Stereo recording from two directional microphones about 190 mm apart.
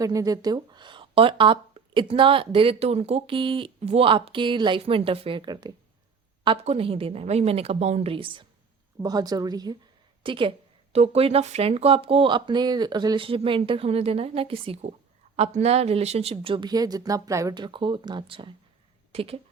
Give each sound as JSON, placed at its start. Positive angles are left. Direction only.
{"t": 0.0, "sound": "a woman's voice", "side_deg": -20}